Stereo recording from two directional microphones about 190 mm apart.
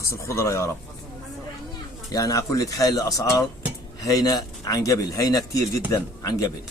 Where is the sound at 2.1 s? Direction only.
20° left (ahead or behind).